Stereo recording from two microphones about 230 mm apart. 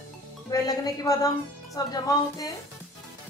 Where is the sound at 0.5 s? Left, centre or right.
Centre.